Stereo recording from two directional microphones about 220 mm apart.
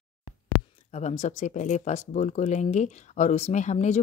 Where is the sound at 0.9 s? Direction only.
30° left (ahead or behind).